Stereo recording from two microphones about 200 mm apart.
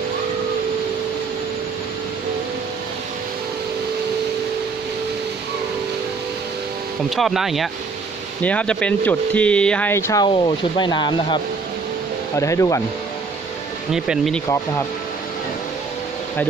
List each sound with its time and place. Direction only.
7.1 s speech: centre (ahead or behind); by 12.8 s 15° left (ahead or behind)
13.9 s speech: 5° right (ahead or behind)